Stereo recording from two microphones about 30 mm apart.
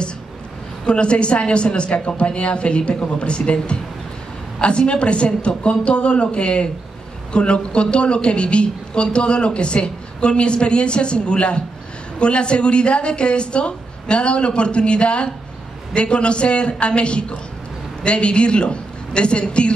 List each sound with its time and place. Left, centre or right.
0.8 s a woman's voice: left